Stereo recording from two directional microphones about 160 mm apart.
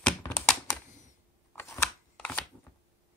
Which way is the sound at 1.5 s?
15° left (ahead or behind).